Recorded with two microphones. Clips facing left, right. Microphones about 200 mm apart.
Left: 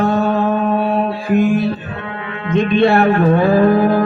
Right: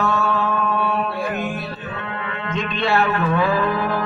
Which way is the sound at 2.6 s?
55° left (ahead or behind).